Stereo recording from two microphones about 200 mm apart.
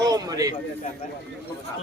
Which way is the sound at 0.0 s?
20° right (ahead or behind).